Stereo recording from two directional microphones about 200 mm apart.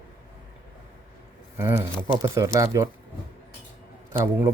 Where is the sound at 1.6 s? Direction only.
10° right (ahead or behind).